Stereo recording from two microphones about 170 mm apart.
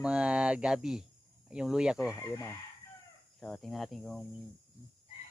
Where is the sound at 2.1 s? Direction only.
15° left (ahead or behind).